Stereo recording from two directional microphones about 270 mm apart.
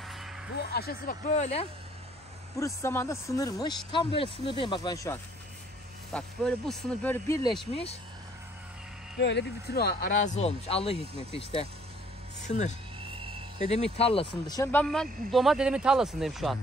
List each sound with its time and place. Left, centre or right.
0.0 s music: centre
0.5 s speech: left
2.6 s speech: centre
7.7 s speech: left
9.2 s speech: left
13.9 s speech: left; by 16.5 s centre